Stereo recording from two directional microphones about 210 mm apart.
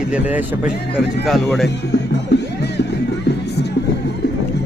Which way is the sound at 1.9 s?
55° left (ahead or behind).